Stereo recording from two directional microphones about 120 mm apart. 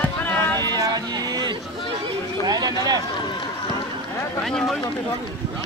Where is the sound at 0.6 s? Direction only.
30° right (ahead or behind).